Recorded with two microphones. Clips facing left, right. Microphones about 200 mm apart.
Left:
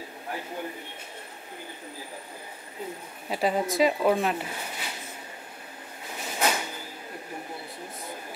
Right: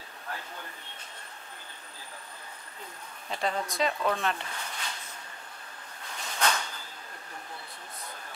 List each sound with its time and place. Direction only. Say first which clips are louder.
3.3 s a woman's voice: left 6 dB; 10° left (ahead or behind)
4.5 s a sound: left 3 dB; 10° left (ahead or behind)
6.1 s drawer open or close: left 3 dB; 15° left (ahead or behind)